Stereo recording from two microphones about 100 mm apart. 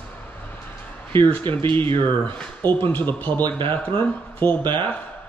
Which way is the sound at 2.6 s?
20° left (ahead or behind).